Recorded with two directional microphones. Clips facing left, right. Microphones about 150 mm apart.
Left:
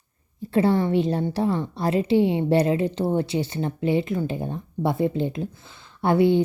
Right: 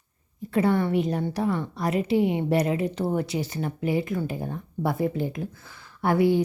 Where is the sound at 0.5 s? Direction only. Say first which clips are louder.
Left 2 dB; 25° left (ahead or behind).